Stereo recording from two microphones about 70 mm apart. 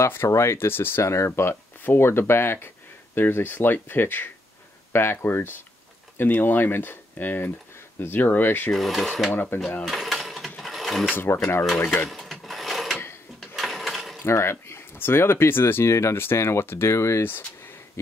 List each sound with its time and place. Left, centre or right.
0.0 s speech: left
8.7 s filing: centre
9.3 s speech: left
9.8 s mechanisms: centre
10.6 s pulleys: centre
11.1 s speech: left
12.1 s filing: centre
13.6 s mechanisms: centre
14.2 s speech: left